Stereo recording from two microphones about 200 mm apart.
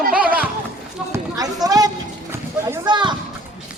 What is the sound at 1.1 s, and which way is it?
Speech, 20° right (ahead or behind).